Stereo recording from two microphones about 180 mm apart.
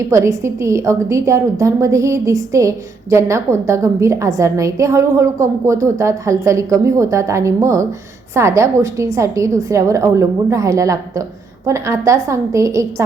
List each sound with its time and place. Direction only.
0.0 s a woman's voice: 15° right (ahead or behind)